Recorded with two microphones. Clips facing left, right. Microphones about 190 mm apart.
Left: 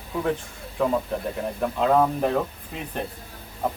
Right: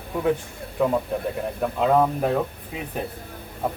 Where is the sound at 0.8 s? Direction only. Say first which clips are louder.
Right 1 dB; 5° right (ahead or behind).